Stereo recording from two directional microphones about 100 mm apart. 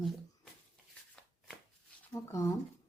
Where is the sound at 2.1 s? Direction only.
35° left (ahead or behind).